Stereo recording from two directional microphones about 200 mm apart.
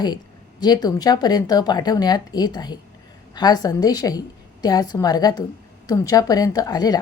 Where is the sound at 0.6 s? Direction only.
20° left (ahead or behind).